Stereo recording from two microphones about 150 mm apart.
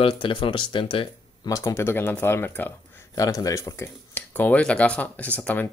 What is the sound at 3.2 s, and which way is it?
Speech, 25° left (ahead or behind).